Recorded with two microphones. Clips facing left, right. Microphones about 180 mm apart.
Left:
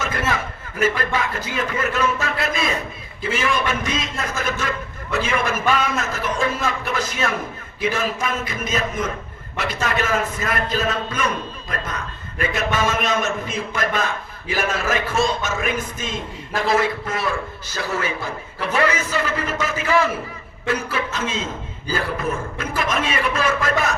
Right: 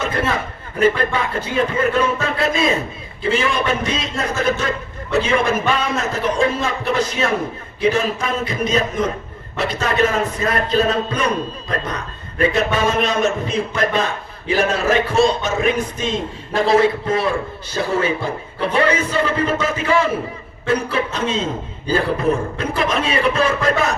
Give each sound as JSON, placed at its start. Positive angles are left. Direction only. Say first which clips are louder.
{"t": 0.0, "sound": "a man's voice", "louder": "right 3 dB", "side_deg": -30}